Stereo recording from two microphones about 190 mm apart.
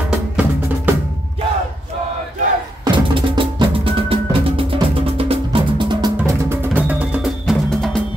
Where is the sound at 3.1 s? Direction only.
25° right (ahead or behind).